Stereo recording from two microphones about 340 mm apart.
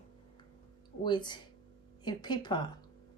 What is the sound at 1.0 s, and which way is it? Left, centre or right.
Speech, centre.